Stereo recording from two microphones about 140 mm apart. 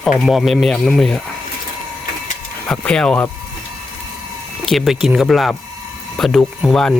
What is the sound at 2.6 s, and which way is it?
Speech, 5° left (ahead or behind).